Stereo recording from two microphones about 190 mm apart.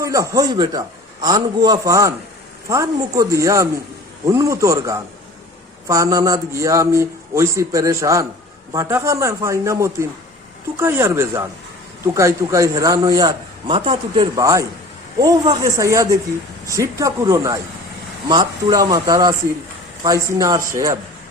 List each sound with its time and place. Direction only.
0.0 s a man's voice: 15° right (ahead or behind)